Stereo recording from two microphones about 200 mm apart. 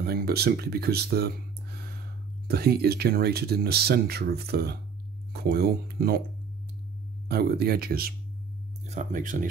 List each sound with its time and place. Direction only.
0.0 s speech: 50° right (ahead or behind)
7.2 s speech: 50° right (ahead or behind)
8.8 s speech: 35° right (ahead or behind)